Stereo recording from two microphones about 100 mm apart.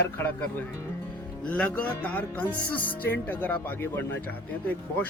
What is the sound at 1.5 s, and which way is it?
Speech, 10° left (ahead or behind).